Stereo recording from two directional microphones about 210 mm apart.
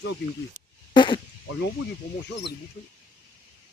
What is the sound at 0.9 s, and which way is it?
Speech, 20° left (ahead or behind).